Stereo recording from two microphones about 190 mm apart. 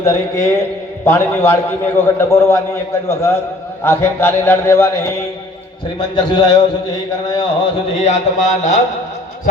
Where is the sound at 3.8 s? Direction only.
10° left (ahead or behind).